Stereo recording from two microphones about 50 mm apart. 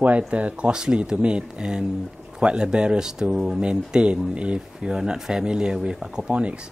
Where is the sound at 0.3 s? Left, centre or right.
Right.